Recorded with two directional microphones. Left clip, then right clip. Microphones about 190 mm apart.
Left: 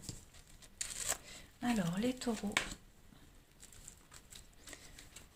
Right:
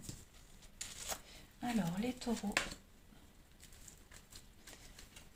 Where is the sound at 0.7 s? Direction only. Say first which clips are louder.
Left 4 dB; 50° left (ahead or behind).